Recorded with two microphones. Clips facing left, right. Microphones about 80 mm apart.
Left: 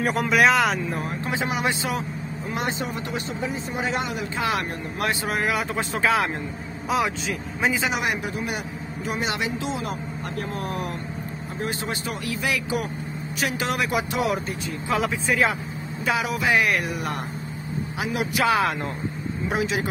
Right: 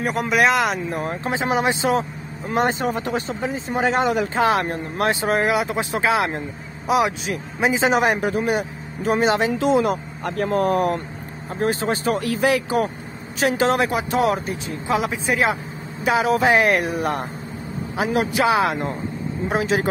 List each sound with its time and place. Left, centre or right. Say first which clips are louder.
0.0 s speech: right 1 dB; centre
1.0 s speech: right 4 dB; right
2.5 s speech: right 8 dB; right
4.4 s speech: right 4 dB; right
5.6 s speech: right 3 dB; centre
7.6 s speech: right 5 dB; right
7.9 s speech: right 7 dB; right
8.5 s speech: right 7 dB; right
9.6 s speech: right 10 dB; right
11.6 s speech: right 9 dB; right
14.9 s speech: right 2 dB; centre
16.1 s speech: right 6 dB; right
18.4 s speech: right 2 dB; right
19.5 s speech: right 4 dB; right